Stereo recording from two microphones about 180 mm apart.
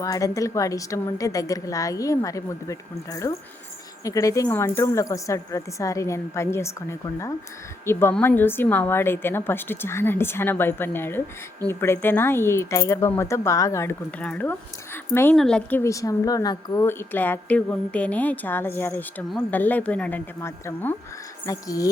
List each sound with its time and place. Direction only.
0.0 s a woman's voice: 20° left (ahead or behind)
14.9 s a sound: 10° left (ahead or behind)
15.4 s a woman's voice: 5° left (ahead or behind)
15.8 s a woman's voice: 20° left (ahead or behind)